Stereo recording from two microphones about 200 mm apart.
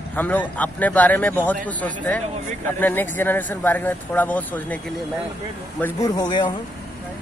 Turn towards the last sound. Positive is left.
turn(degrees=20)  # may be behind; listen again after turning